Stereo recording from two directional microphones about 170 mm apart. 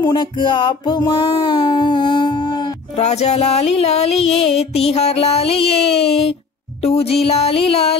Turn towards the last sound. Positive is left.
turn(degrees=35)  # may be behind; listen again after turning